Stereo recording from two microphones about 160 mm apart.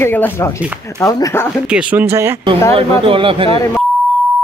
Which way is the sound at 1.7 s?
10° right (ahead or behind).